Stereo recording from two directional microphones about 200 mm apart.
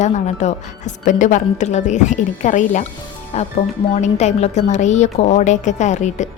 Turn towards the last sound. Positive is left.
turn(degrees=35)  # may be behind; listen again after turning